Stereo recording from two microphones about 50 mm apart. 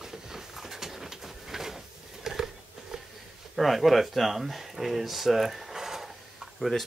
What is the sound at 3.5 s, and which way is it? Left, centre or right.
Speech, centre.